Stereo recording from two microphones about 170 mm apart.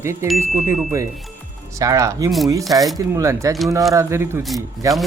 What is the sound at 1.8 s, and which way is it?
Speech, 20° right (ahead or behind).